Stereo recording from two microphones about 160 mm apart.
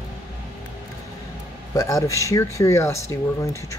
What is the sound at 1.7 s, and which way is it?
Speech, 20° left (ahead or behind).